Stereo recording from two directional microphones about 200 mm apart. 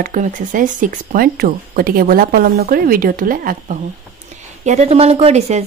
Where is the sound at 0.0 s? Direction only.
40° right (ahead or behind).